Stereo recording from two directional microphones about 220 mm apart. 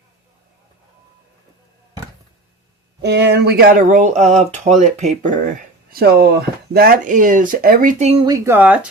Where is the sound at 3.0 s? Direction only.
50° right (ahead or behind); by 8.9 s 5° right (ahead or behind).